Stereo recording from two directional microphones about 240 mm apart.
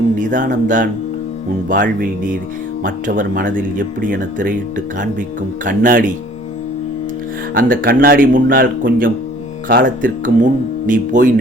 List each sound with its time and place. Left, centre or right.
0.2 s speech: right
5.6 s speech: right
7.5 s speech: right